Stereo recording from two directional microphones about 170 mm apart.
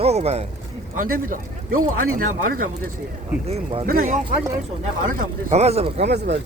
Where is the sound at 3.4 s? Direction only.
35° right (ahead or behind).